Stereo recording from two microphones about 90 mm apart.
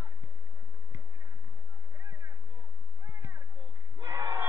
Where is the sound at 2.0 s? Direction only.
55° right (ahead or behind).